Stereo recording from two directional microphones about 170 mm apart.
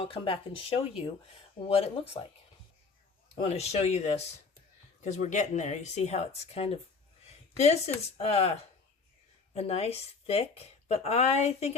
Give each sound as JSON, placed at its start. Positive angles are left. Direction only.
{"t": 0.0, "sound": "speech", "side_deg": 30}
{"t": 3.3, "sound": "speech", "side_deg": 35}